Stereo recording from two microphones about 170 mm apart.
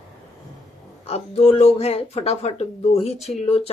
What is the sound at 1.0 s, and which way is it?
A woman's voice, 35° left (ahead or behind).